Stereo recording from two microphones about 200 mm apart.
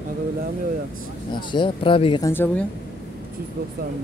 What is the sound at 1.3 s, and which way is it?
Speech, 25° left (ahead or behind).